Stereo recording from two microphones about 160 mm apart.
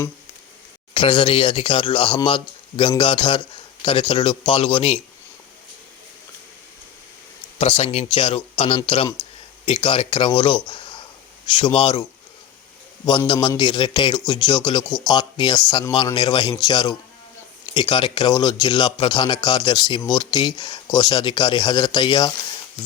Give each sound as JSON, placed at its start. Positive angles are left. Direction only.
{"t": 0.9, "sound": "speech", "side_deg": 35}
{"t": 7.6, "sound": "speech", "side_deg": 40}
{"t": 13.1, "sound": "a man's voice", "side_deg": 25}